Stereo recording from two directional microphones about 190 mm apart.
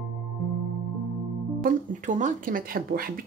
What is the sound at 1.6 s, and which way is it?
Speech, 40° right (ahead or behind).